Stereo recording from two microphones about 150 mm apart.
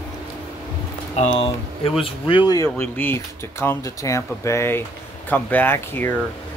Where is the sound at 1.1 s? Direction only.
45° left (ahead or behind); by 2.7 s 25° left (ahead or behind).